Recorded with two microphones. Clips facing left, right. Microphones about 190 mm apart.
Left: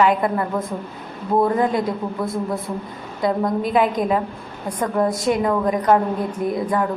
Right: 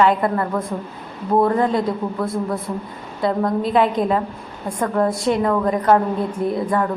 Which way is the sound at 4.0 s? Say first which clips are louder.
Right 1 dB; 30° right (ahead or behind).